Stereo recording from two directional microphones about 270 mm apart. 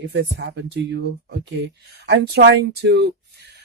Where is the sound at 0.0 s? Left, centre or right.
Right.